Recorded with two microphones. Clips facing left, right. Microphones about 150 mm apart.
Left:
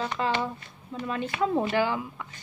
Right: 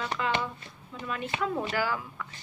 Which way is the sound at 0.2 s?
30° left (ahead or behind).